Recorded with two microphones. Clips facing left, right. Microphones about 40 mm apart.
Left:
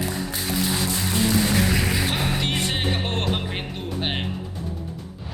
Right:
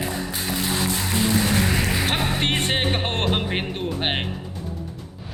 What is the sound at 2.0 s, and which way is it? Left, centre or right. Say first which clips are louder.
Music: right 2 dB; right.